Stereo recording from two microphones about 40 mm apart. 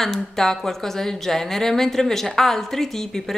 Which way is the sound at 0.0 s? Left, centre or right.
Centre.